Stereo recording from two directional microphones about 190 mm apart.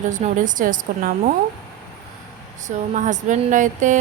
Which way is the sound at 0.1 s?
45° right (ahead or behind).